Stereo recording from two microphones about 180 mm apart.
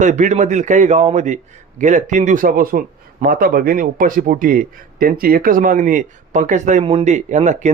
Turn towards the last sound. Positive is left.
turn(degrees=-40)  # may be behind; listen again after turning